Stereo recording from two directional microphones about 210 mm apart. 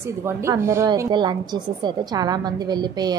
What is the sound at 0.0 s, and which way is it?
A woman's voice, 10° right (ahead or behind).